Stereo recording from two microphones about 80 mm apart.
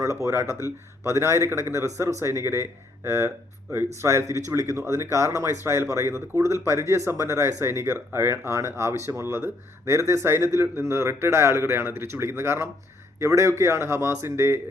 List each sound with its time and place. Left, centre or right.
0.0 s speech: right
0.6 s speech: left
1.1 s speech: right